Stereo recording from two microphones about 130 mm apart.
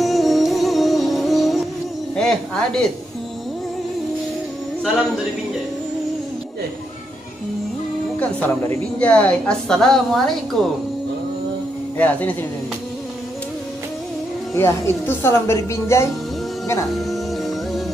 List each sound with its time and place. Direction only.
0.0 s music: centre (ahead or behind)
2.1 s a sound: 5° left (ahead or behind)
8.2 s a woman's voice: 10° left (ahead or behind)
12.0 s a woman's voice: 10° left (ahead or behind)
14.5 s a woman's voice: 20° left (ahead or behind)
16.9 s music: centre (ahead or behind)